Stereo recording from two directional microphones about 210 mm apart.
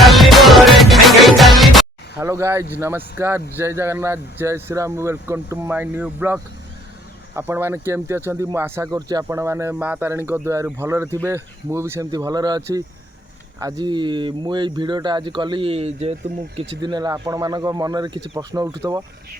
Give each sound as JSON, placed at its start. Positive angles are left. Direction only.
{"t": 0.0, "sound": "music", "side_deg": 0}
{"t": 2.2, "sound": "speech", "side_deg": -15}